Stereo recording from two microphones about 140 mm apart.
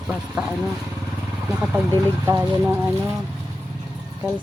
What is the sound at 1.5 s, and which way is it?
Speech, 5° right (ahead or behind).